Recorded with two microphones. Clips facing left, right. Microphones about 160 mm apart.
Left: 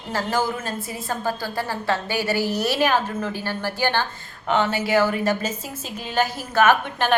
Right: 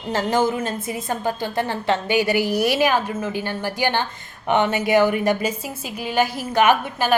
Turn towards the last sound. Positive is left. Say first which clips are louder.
# right 1 dB
turn(degrees=-10)  # may be behind; listen again after turning